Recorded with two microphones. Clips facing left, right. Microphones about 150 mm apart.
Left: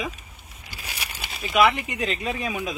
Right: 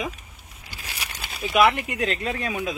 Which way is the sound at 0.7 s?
10° left (ahead or behind).